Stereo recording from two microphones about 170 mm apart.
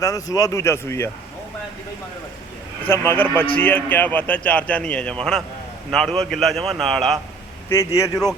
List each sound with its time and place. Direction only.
0.0 s speech: 20° left (ahead or behind)
2.8 s a man's voice: 15° left (ahead or behind)
7.7 s speech: 15° left (ahead or behind)